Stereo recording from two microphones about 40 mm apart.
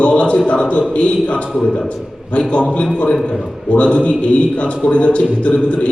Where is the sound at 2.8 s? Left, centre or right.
Left.